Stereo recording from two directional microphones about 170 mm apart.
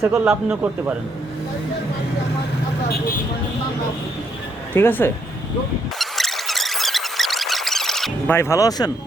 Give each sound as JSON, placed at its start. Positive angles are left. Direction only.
{"t": 0.0, "sound": "a man's voice", "side_deg": -15}
{"t": 4.7, "sound": "speech", "side_deg": 10}
{"t": 6.0, "sound": "squeak", "side_deg": 0}
{"t": 8.3, "sound": "speech", "side_deg": 15}